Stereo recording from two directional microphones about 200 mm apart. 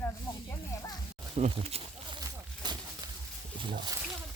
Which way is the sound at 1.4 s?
30° right (ahead or behind).